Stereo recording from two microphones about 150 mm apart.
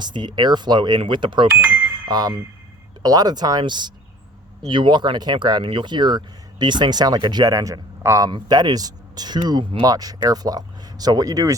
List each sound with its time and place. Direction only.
0.0 s speech: 30° right (ahead or behind)